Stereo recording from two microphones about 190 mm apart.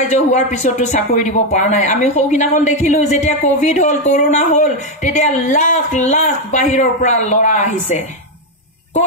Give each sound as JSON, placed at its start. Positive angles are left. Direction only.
{"t": 0.1, "sound": "speech", "side_deg": 40}